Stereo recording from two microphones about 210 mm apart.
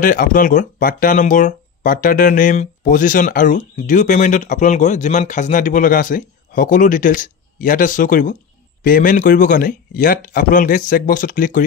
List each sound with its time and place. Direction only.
0.0 s speech: 40° left (ahead or behind)